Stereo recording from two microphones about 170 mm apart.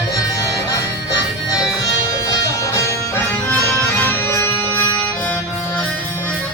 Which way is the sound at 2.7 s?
15° left (ahead or behind).